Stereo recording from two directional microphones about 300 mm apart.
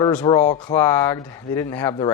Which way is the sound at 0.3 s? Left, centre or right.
Centre.